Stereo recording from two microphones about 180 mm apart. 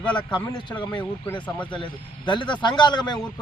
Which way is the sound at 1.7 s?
25° left (ahead or behind).